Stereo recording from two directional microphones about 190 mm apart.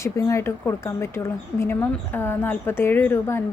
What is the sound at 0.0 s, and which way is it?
Speech, 15° left (ahead or behind).